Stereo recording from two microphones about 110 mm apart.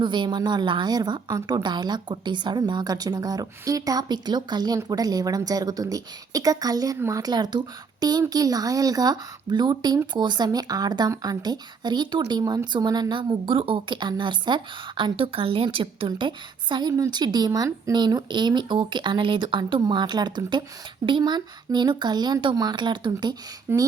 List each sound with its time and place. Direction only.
0.0 s a woman's voice: 45° right (ahead or behind)
23.7 s speech: 20° right (ahead or behind)